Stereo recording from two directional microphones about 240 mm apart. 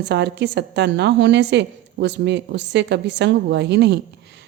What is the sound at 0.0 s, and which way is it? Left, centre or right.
Speech, right.